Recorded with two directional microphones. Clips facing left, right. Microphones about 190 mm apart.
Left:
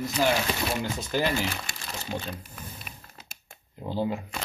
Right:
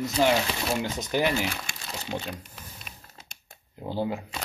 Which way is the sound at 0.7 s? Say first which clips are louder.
Right 1 dB; 20° right (ahead or behind).